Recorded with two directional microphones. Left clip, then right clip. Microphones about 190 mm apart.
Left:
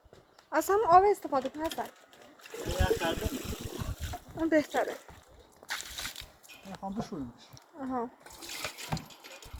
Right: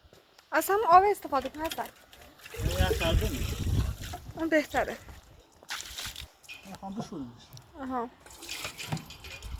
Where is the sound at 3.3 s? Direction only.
35° left (ahead or behind).